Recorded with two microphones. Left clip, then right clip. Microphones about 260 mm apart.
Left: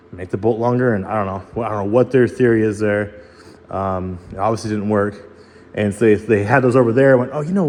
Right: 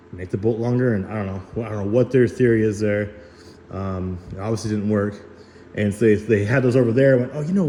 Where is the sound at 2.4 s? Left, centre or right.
Left.